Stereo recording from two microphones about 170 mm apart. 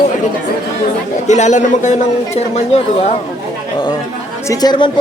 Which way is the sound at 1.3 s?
45° left (ahead or behind).